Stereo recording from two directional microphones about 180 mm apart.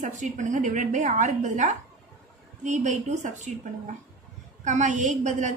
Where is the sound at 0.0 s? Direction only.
40° right (ahead or behind).